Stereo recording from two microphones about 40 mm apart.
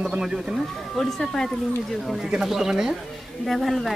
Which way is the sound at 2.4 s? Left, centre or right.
Centre.